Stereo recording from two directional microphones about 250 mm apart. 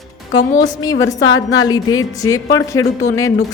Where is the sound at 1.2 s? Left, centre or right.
Left.